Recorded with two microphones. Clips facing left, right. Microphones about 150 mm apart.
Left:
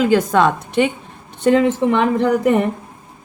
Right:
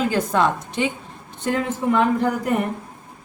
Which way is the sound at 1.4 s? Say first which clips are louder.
Left 9 dB; 85° left.